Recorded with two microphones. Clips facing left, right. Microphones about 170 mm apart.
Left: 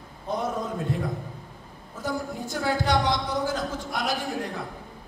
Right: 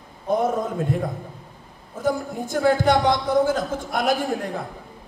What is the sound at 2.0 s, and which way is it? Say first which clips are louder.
Speech: right 6 dB; 50° right (ahead or behind).